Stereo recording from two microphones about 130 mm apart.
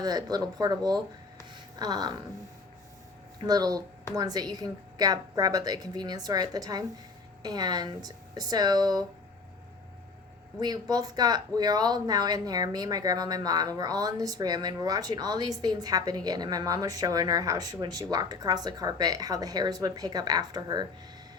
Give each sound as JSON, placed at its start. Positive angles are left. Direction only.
{"t": 0.0, "sound": "speech", "side_deg": -30}
{"t": 3.4, "sound": "speech", "side_deg": -30}
{"t": 10.6, "sound": "speech", "side_deg": -30}